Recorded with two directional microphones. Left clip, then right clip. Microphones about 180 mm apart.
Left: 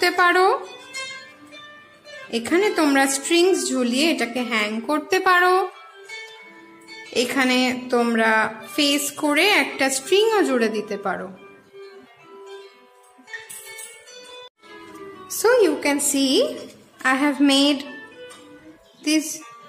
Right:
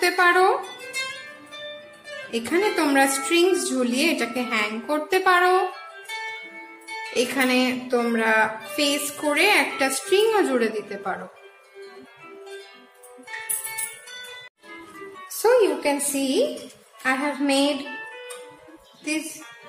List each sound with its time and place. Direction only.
0.0 s speech: 40° left (ahead or behind)
2.3 s a woman's voice: 35° left (ahead or behind)
7.2 s a woman's voice: 40° left (ahead or behind)
15.4 s music: 45° left (ahead or behind)
16.1 s a woman's voice: 45° left (ahead or behind)